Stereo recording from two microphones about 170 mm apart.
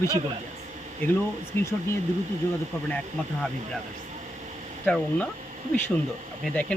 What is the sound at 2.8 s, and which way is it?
Speech, 5° left (ahead or behind).